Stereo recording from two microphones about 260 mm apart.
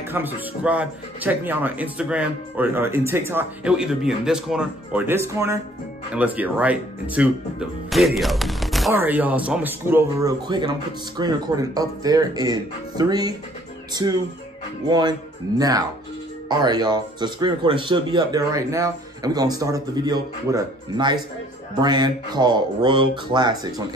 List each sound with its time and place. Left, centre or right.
0.1 s speech: centre